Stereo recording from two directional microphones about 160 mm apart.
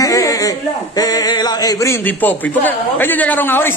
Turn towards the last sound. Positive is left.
turn(degrees=15)  # may be behind; listen again after turning